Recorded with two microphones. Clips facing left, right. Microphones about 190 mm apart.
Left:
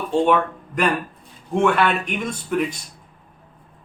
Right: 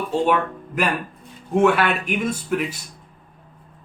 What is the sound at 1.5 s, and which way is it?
Speech, 5° right (ahead or behind).